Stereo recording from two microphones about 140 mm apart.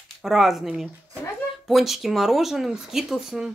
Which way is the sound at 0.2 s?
Centre (ahead or behind).